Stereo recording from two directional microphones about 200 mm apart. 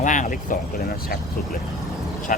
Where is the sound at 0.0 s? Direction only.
40° left (ahead or behind).